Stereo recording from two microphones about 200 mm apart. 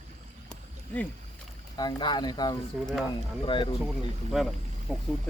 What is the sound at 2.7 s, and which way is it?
Speech, 5° right (ahead or behind).